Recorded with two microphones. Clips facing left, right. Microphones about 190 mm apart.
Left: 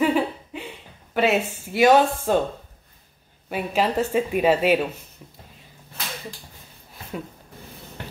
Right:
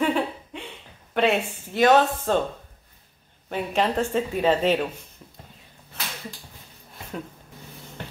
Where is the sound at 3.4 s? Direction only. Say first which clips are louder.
Left 1 dB; 5° left (ahead or behind).